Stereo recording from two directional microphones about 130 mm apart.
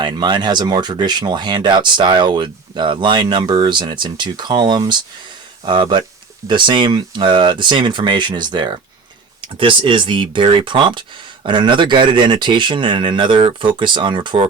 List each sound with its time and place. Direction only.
0.0 s speech: 35° right (ahead or behind)